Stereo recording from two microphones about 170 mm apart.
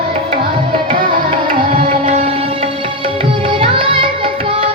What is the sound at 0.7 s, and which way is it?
Music, 30° right (ahead or behind).